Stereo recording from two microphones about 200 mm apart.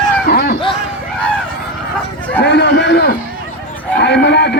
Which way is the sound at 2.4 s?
60° left (ahead or behind).